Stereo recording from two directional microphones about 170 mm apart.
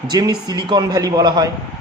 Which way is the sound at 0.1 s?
25° right (ahead or behind).